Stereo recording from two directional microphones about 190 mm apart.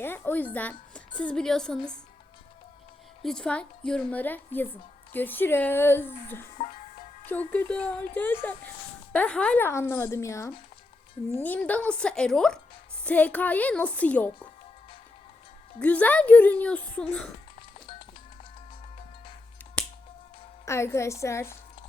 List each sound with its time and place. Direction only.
0.0 s a woman's voice: 10° left (ahead or behind)
3.2 s a woman's voice: 5° left (ahead or behind)
6.6 s music: 40° left (ahead or behind)
7.3 s a woman's voice: 10° left (ahead or behind)
15.8 s speech: 5° left (ahead or behind)
17.7 s music: 25° left (ahead or behind)
19.8 s finger snapping: 5° left (ahead or behind)
20.7 s speech: 15° left (ahead or behind)